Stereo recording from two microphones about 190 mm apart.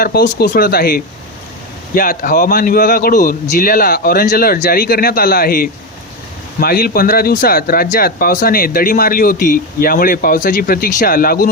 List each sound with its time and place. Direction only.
0.0 s speech: 55° left (ahead or behind)